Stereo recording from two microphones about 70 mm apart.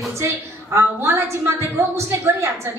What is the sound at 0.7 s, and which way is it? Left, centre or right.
A woman's voice, right.